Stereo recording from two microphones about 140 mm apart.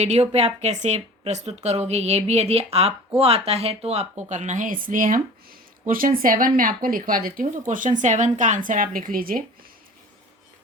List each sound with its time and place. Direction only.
0.0 s speech: 50° right (ahead or behind)
4.3 s speech: 60° right (ahead or behind); by 7.6 s 90° right
7.7 s speech: 70° right (ahead or behind); by 9.4 s 85° right